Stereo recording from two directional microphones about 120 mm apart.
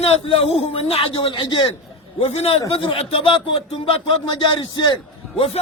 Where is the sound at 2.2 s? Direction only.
60° left (ahead or behind).